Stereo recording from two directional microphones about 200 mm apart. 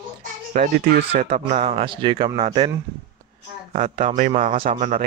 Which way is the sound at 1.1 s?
30° right (ahead or behind).